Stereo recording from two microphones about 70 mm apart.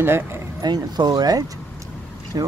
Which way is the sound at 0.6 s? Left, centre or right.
Right.